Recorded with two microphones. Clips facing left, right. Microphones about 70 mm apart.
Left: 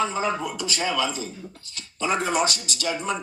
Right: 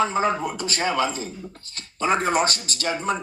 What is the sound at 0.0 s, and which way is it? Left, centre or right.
Speech, right.